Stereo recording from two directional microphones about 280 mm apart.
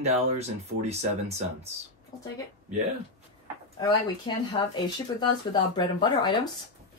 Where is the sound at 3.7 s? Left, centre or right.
Centre.